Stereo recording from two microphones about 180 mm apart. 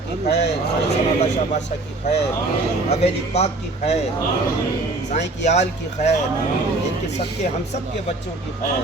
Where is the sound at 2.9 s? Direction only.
35° left (ahead or behind).